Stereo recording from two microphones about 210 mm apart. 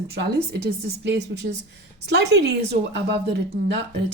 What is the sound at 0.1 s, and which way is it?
Speech, 50° right (ahead or behind).